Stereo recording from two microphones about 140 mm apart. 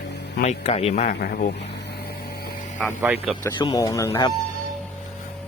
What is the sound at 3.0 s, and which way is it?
Speech, 10° right (ahead or behind).